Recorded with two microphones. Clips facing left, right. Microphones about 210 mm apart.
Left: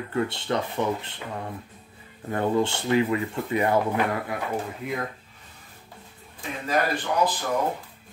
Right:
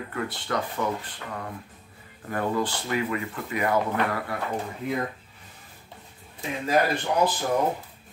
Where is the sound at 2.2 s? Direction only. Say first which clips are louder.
Left 3 dB; 25° left (ahead or behind).